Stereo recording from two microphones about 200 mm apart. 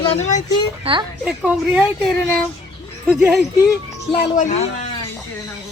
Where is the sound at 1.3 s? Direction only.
5° right (ahead or behind).